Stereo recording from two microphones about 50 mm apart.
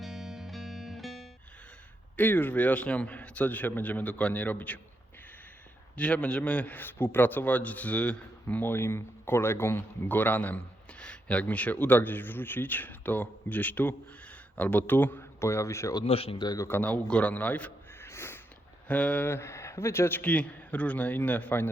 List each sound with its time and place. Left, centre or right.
0.0 s music: centre
2.1 s a man's voice: left
6.0 s a man's voice: left
8.6 s speech: left
10.1 s a man's voice: left
11.0 s a man's voice: left
15.4 s speech: left
16.6 s a man's voice: left
17.1 s a man's voice: left
18.0 s a sound: left
18.9 s a man's voice: left
19.2 s speech: left
20.2 s a man's voice: left